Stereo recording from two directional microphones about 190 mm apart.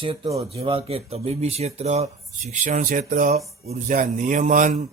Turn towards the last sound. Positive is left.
turn(degrees=-40)  # may be behind; listen again after turning